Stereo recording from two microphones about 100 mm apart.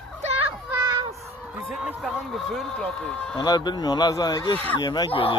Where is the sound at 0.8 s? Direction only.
40° right (ahead or behind).